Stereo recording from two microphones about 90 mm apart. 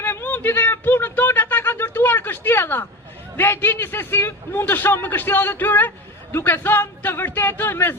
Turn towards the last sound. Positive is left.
turn(degrees=25)  # may be behind; listen again after turning